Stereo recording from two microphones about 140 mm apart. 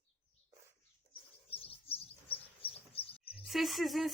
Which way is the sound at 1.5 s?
45° left (ahead or behind).